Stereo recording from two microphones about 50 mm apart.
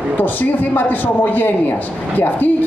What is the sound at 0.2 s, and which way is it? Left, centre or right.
A woman's voice, left.